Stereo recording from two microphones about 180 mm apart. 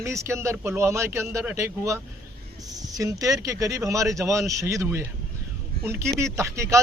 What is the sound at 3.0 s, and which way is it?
A man's voice, 20° right (ahead or behind).